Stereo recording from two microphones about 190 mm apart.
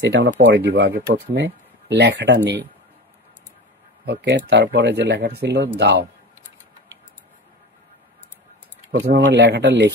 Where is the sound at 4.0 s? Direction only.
60° right (ahead or behind).